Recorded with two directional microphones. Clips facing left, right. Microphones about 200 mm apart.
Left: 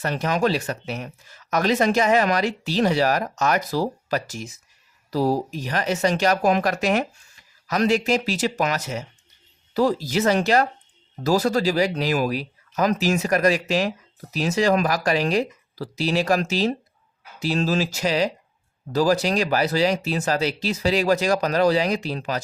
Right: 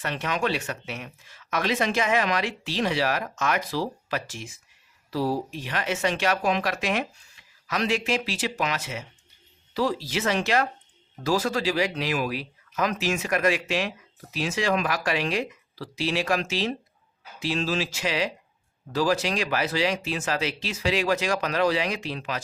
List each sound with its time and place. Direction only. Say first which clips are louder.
0.0 s speech: left 5 dB; 40° left (ahead or behind)